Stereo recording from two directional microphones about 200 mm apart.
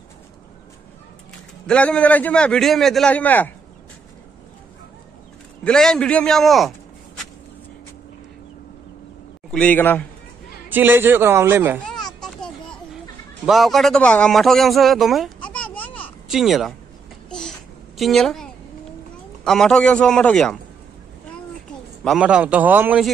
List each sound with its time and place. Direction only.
1.7 s a man's voice: 5° left (ahead or behind)
5.6 s a man's voice: 5° left (ahead or behind)
9.5 s a man's voice: 5° left (ahead or behind)
10.7 s a man's voice: 10° right (ahead or behind)
11.9 s a sound: centre (ahead or behind)
13.5 s speech: centre (ahead or behind)
17.3 s babbling: 5° left (ahead or behind)
19.4 s a man's voice: 5° left (ahead or behind)
22.0 s a man's voice: centre (ahead or behind)